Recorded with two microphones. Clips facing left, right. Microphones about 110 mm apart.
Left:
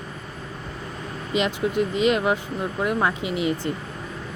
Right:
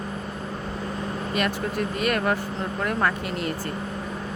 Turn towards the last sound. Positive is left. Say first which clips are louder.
# left 4 dB
turn(degrees=15)  # may be behind; listen again after turning